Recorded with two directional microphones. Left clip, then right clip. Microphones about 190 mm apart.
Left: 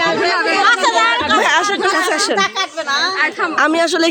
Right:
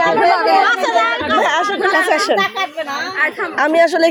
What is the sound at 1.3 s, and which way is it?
Speech, 20° left (ahead or behind).